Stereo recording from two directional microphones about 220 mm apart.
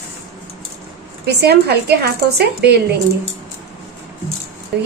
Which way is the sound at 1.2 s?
45° right (ahead or behind).